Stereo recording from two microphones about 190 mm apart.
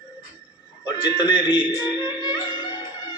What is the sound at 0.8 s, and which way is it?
Music, 20° left (ahead or behind).